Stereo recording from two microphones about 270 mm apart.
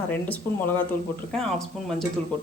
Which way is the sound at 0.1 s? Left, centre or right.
Centre.